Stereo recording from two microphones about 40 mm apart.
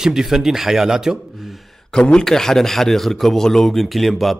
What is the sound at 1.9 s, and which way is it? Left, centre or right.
Speech, centre.